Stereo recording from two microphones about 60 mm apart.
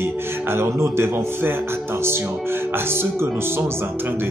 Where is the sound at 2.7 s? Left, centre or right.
Right.